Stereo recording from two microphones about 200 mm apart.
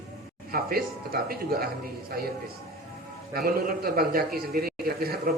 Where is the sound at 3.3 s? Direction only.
50° right (ahead or behind).